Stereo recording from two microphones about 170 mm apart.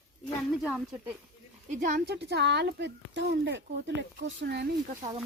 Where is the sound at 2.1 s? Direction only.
80° right.